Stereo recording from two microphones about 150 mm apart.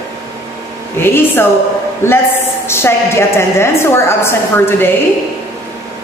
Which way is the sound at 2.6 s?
15° left (ahead or behind).